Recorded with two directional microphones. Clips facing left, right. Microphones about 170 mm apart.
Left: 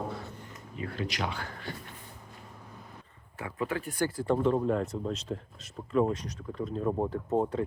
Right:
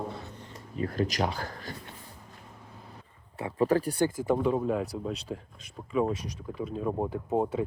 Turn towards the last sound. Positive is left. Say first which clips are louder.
# even
turn(degrees=-10)  # may be behind; listen again after turning